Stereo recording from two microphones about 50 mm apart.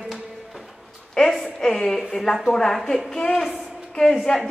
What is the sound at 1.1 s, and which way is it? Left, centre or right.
A woman's voice, centre.